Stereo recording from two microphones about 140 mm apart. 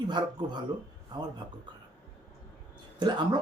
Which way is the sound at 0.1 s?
30° right (ahead or behind).